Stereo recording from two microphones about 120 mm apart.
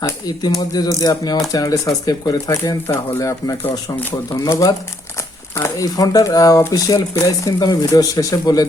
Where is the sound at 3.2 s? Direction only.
30° left (ahead or behind).